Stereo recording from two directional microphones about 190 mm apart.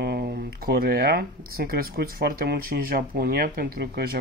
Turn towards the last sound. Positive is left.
turn(degrees=-55)  # may be behind; listen again after turning